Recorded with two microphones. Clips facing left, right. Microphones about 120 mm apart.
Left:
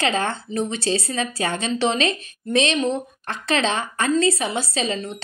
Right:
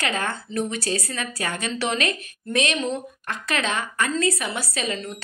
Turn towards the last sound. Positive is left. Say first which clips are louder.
# left 3 dB
turn(degrees=25)  # may be behind; listen again after turning